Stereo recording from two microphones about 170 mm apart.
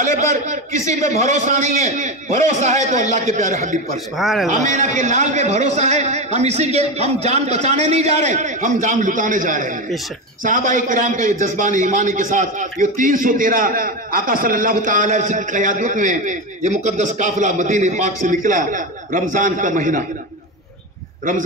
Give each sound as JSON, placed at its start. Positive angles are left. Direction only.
{"t": 0.0, "sound": "a man's voice", "side_deg": -45}
{"t": 4.2, "sound": "a man's voice", "side_deg": 0}
{"t": 4.5, "sound": "a man's voice", "side_deg": -45}